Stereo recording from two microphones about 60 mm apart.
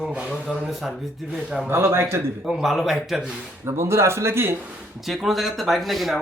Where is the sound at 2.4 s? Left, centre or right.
Centre.